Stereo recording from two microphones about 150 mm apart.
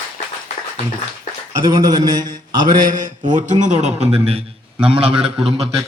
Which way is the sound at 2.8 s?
60° right (ahead or behind).